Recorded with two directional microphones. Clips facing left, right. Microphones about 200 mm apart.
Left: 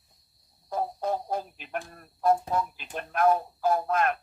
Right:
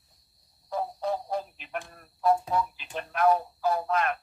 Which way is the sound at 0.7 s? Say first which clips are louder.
Left 1 dB; 45° left (ahead or behind).